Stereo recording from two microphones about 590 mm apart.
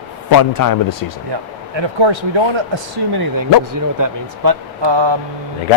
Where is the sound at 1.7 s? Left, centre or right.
Right.